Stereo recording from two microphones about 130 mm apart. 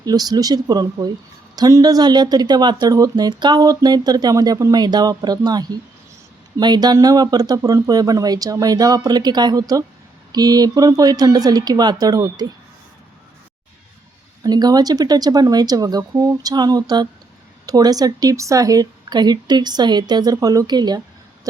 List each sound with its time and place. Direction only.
0.0 s speech: 30° right (ahead or behind)
14.4 s speech: 30° right (ahead or behind)